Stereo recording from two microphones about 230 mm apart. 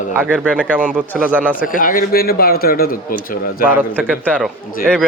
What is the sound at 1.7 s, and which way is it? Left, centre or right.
A man's voice, left.